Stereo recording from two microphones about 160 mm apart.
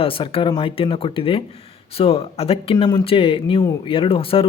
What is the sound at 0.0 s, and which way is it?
Speech, 35° left (ahead or behind).